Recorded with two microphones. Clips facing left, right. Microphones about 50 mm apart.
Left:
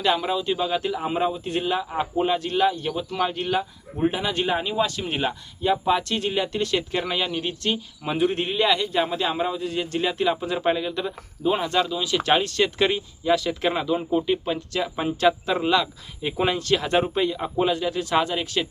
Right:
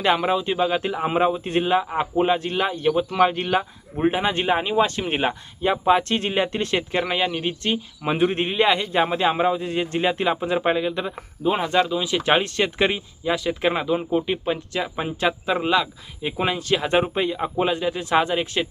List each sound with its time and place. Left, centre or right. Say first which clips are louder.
0.0 s speech: right 3 dB; right